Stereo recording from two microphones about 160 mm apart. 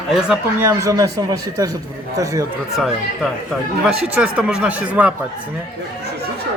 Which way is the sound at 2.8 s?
Centre (ahead or behind).